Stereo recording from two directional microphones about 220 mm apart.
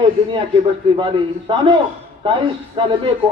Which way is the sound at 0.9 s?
25° right (ahead or behind).